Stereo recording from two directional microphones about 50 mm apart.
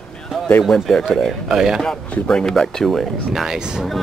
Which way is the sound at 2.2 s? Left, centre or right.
Centre.